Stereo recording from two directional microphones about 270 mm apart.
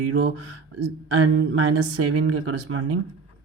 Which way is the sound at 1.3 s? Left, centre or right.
Right.